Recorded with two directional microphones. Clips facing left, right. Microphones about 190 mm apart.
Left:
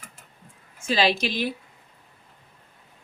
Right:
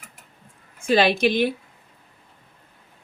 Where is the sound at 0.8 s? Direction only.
55° right (ahead or behind).